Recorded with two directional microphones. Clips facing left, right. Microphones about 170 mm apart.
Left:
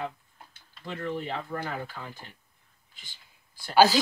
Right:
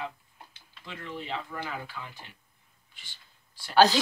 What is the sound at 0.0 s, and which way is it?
Speech, 50° left (ahead or behind).